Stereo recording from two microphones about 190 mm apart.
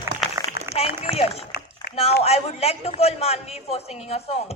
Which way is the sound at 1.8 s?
60° left (ahead or behind).